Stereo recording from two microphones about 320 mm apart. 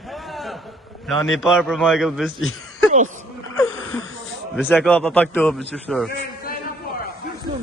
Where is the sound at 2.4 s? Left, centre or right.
Left.